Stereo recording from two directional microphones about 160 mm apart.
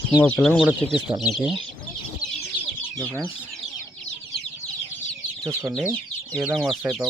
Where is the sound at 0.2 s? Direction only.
5° left (ahead or behind).